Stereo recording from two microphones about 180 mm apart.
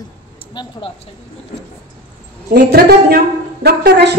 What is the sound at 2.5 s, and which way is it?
A woman's voice, 65° right (ahead or behind).